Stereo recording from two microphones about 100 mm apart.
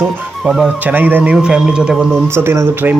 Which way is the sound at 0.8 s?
20° right (ahead or behind).